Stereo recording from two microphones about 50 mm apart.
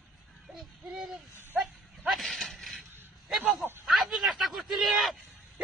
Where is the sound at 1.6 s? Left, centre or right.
Centre.